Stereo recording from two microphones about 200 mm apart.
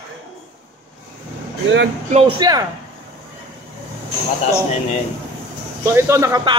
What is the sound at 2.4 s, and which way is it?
Speech, 20° right (ahead or behind).